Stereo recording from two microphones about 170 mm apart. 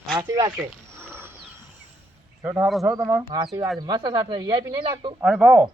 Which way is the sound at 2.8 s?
15° right (ahead or behind).